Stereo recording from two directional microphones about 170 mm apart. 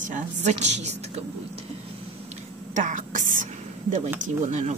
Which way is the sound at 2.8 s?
50° right (ahead or behind).